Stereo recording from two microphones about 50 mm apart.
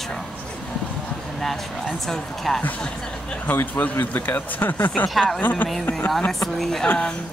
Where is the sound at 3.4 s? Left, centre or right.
Left.